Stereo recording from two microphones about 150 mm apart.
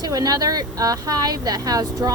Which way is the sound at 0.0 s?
25° right (ahead or behind).